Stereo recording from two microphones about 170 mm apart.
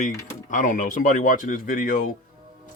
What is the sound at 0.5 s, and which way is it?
Speech, 50° left (ahead or behind).